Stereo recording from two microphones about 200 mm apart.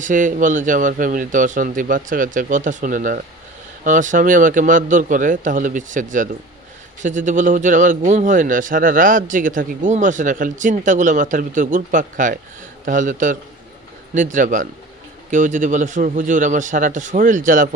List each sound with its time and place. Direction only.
0.0 s a man's voice: 40° right (ahead or behind)